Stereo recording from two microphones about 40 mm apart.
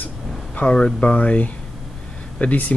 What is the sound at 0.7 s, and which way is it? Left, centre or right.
Speech, left.